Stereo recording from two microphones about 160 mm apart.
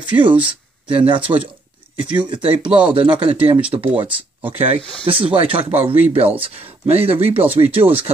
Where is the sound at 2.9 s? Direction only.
35° right (ahead or behind).